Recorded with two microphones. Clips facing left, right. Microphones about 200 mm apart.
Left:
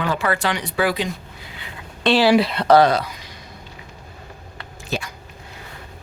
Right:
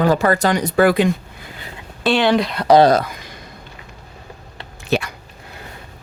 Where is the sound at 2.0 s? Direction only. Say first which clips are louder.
Left 1 dB; centre (ahead or behind).